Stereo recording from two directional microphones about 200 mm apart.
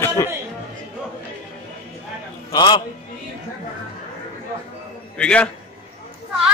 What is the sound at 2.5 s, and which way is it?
Speech, 20° left (ahead or behind).